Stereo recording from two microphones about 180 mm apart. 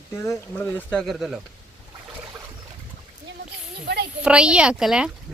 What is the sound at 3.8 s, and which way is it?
Speech, 65° right (ahead or behind).